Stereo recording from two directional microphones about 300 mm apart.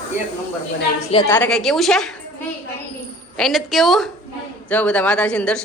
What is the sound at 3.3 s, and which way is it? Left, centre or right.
A woman's voice, centre.